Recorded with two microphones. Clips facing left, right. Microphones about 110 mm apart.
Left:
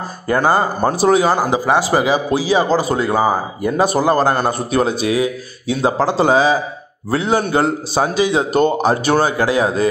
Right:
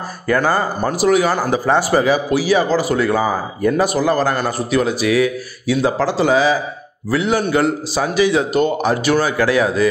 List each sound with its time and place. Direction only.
0.3 s speech: 20° left (ahead or behind)